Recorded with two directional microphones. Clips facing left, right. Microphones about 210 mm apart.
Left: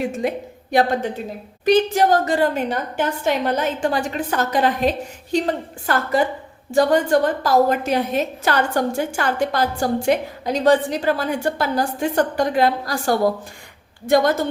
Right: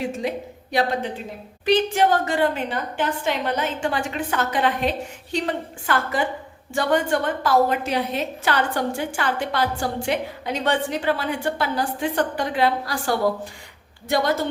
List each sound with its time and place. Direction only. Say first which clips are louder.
0.2 s speech: left 3 dB; 50° left (ahead or behind)
1.6 s a woman's voice: left 3 dB; 40° left (ahead or behind)